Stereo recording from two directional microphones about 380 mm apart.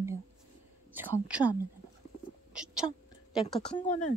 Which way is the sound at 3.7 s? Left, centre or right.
Centre.